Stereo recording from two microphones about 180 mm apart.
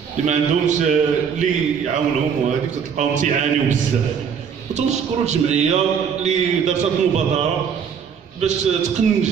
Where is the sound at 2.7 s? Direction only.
40° right (ahead or behind).